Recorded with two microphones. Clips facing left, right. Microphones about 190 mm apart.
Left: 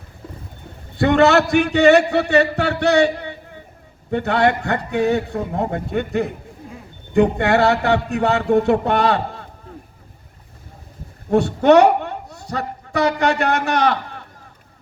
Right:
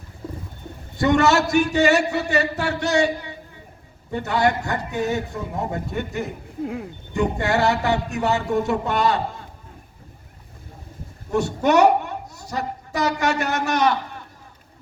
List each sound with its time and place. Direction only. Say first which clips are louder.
0.9 s a man's voice: left 4 dB; 60° left (ahead or behind)
11.3 s a man's voice: left 6 dB; 60° left (ahead or behind)